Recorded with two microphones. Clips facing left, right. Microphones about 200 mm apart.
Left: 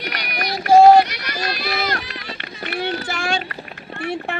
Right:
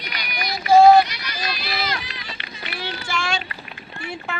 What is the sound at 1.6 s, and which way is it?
Run, 45° left (ahead or behind).